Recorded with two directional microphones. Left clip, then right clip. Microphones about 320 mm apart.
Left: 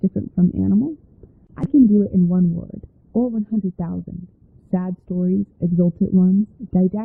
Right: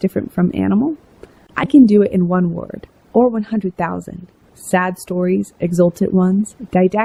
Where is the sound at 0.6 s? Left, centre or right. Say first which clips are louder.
Right 4 dB; centre.